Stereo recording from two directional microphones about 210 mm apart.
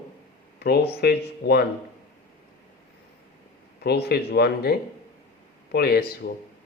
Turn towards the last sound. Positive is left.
turn(degrees=45)  # may be behind; listen again after turning